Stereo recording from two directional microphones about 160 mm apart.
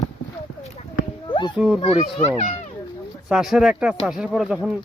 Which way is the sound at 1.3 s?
30° left (ahead or behind).